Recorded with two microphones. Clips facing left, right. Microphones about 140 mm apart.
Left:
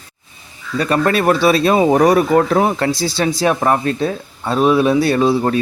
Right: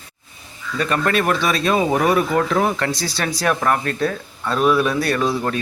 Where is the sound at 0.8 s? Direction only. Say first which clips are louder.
Left 4 dB; 35° left (ahead or behind).